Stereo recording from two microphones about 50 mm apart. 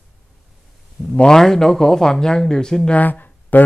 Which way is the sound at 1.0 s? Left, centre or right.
Centre.